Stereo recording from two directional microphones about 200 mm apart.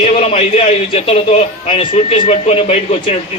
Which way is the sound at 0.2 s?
30° left (ahead or behind).